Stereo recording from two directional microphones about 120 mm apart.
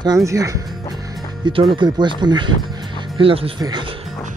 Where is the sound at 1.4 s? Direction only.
45° right (ahead or behind).